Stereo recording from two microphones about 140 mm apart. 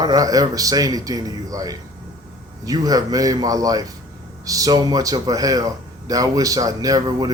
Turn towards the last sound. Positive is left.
turn(degrees=-25)  # may be behind; listen again after turning